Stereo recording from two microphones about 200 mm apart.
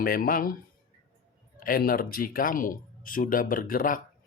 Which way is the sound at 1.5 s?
45° left (ahead or behind).